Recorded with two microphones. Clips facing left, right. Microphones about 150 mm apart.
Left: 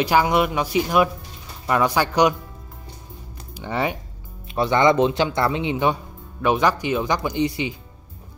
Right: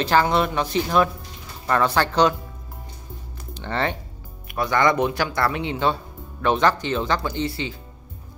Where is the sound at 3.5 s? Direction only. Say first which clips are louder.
Left 1 dB; 10° left (ahead or behind).